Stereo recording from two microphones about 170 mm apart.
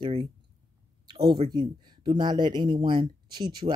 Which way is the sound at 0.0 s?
30° right (ahead or behind).